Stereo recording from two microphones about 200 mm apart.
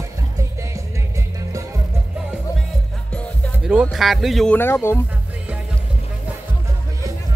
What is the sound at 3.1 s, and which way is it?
Speech, 5° right (ahead or behind).